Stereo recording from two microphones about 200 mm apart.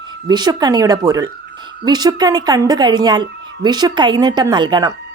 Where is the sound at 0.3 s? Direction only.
20° right (ahead or behind).